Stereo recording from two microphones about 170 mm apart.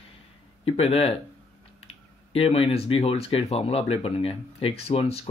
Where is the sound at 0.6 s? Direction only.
35° left (ahead or behind).